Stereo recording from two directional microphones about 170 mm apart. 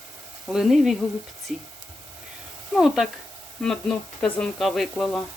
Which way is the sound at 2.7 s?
5° right (ahead or behind).